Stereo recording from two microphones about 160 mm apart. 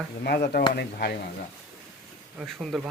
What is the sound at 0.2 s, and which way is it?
Speech, 90° left.